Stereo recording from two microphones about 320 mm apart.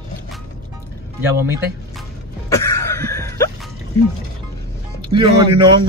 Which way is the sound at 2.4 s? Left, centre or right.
Centre.